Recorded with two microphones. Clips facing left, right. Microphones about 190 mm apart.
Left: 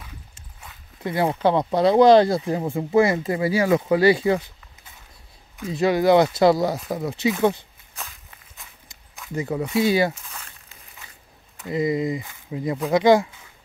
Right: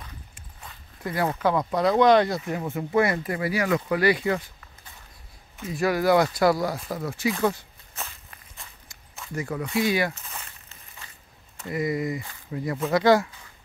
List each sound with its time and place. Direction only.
1.0 s speech: 20° left (ahead or behind)
5.7 s speech: 25° left (ahead or behind)
9.3 s speech: 20° left (ahead or behind)
10.2 s a sound: 10° right (ahead or behind)
11.7 s speech: 25° left (ahead or behind)